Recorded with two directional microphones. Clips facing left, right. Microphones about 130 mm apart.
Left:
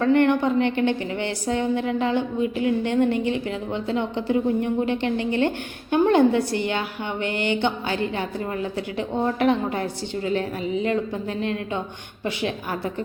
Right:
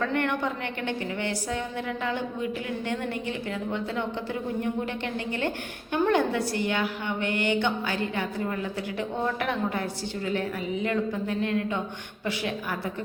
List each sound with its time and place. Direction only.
0.0 s a woman's voice: 25° left (ahead or behind)